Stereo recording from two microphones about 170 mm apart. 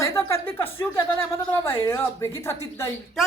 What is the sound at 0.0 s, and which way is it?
Speech, 15° left (ahead or behind).